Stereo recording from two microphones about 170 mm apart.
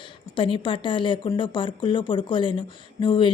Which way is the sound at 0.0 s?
30° left (ahead or behind).